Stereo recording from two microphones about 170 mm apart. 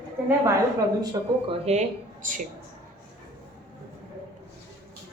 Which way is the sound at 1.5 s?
40° right (ahead or behind).